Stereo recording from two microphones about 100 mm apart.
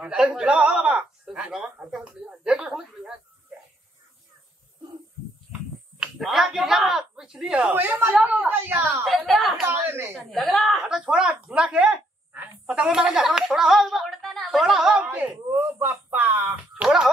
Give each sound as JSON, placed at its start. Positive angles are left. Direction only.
{"t": 0.0, "sound": "a man's voice", "side_deg": -10}
{"t": 5.9, "sound": "speech", "side_deg": -5}
{"t": 9.0, "sound": "a woman's voice", "side_deg": 0}
{"t": 9.7, "sound": "speech", "side_deg": -25}
{"t": 10.1, "sound": "speech", "side_deg": 5}
{"t": 15.0, "sound": "speech", "side_deg": -20}
{"t": 16.7, "sound": "speech", "side_deg": -5}